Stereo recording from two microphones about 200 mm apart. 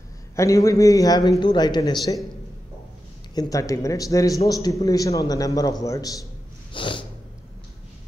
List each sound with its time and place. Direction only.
0.4 s a man's voice: 15° left (ahead or behind)
3.3 s a man's voice: 15° left (ahead or behind)
6.7 s snort: 25° left (ahead or behind)